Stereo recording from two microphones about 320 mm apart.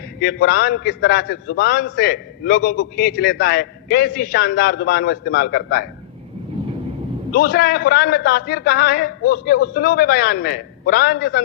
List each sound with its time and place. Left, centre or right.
0.2 s a man's voice: left
7.3 s a man's voice: left